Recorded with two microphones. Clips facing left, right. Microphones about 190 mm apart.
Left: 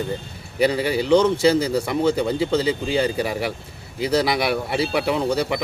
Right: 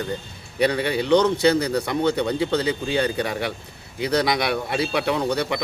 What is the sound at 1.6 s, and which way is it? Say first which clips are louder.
Speech: left 2 dB; 30° left (ahead or behind).